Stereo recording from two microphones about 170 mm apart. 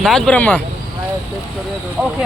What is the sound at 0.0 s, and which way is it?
Speech, centre (ahead or behind).